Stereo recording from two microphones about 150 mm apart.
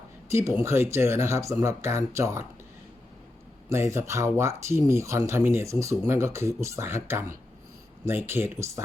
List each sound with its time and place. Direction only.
0.3 s speech: 20° right (ahead or behind)
3.7 s speech: 20° right (ahead or behind)